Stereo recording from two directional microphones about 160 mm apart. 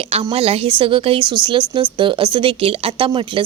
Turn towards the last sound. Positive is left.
turn(degrees=-30)  # may be behind; listen again after turning